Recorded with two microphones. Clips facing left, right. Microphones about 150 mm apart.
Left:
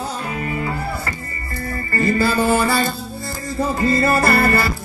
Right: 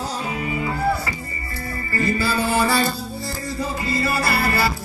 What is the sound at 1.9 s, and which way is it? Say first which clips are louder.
Music: left 4 dB; 50° left (ahead or behind).